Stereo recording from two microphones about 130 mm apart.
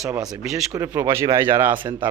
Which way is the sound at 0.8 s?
20° right (ahead or behind).